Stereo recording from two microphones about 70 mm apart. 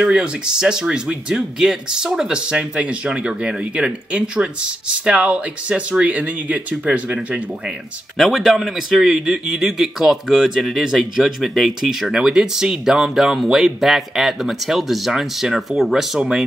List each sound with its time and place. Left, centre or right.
0.0 s speech: centre
8.2 s a man's voice: centre